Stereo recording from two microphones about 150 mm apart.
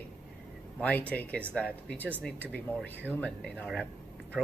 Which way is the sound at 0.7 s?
10° left (ahead or behind).